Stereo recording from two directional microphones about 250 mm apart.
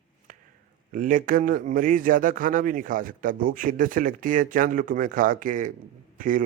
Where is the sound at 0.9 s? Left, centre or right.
Right.